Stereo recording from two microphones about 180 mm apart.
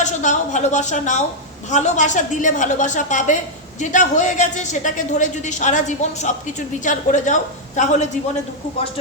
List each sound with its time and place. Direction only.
0.0 s a woman's voice: 40° left (ahead or behind)